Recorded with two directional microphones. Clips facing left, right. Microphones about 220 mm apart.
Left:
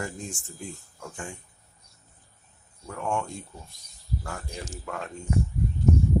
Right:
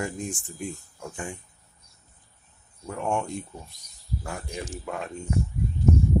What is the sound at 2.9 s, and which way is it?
Speech, 20° right (ahead or behind).